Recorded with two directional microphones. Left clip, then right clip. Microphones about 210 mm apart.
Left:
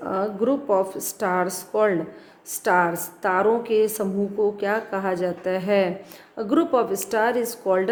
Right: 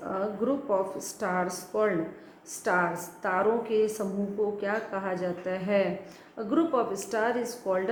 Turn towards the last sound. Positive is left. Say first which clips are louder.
# left 7 dB
turn(degrees=50)  # may be behind; listen again after turning